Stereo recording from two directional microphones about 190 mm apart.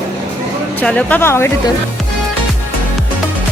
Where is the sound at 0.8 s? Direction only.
5° left (ahead or behind).